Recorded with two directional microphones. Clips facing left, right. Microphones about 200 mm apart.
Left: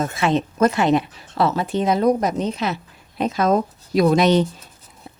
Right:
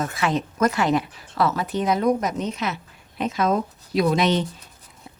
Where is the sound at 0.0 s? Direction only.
25° left (ahead or behind).